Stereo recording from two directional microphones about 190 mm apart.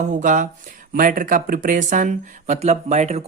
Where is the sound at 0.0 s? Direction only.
40° right (ahead or behind).